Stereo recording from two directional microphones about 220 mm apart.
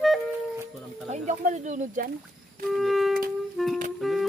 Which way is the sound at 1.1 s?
35° right (ahead or behind).